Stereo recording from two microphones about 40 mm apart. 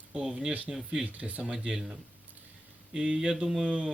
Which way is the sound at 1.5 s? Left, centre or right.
Centre.